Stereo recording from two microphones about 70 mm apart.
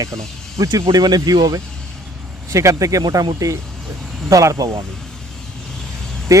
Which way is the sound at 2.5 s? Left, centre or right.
Right.